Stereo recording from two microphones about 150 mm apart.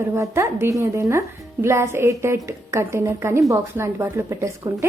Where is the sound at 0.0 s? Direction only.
20° right (ahead or behind).